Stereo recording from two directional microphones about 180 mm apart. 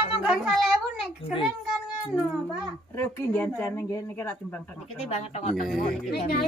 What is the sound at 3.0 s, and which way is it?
Speech, 10° left (ahead or behind).